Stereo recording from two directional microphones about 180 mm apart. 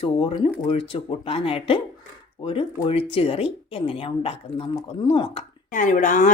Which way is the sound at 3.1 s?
35° left (ahead or behind).